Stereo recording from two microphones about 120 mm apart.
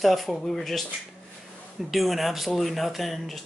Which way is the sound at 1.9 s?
Centre (ahead or behind).